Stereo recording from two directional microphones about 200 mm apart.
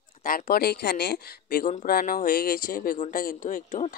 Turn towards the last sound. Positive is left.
turn(degrees=40)  # may be behind; listen again after turning